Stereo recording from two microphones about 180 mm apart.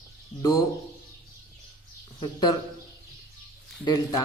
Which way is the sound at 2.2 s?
25° left (ahead or behind).